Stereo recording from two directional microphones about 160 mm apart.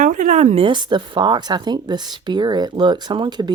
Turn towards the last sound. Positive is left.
turn(degrees=-25)  # may be behind; listen again after turning